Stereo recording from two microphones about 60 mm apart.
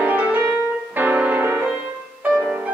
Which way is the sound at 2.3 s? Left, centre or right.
Centre.